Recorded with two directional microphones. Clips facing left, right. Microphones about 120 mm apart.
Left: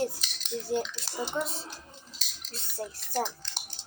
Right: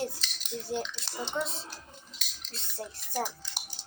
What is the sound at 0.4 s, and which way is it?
Cutlery, centre (ahead or behind).